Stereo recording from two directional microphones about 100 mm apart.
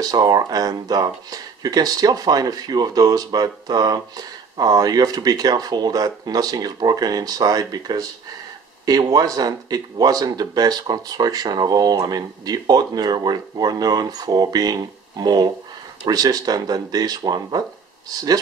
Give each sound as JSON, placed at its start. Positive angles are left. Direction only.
{"t": 0.0, "sound": "speech", "side_deg": -40}